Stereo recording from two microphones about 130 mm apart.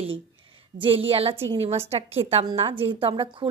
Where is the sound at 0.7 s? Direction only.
45° right (ahead or behind).